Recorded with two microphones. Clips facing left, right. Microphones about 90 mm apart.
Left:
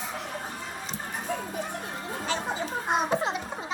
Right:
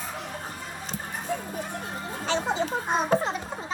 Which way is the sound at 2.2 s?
25° right (ahead or behind).